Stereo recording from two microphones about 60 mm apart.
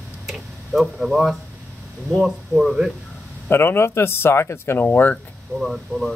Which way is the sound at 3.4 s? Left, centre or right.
Left.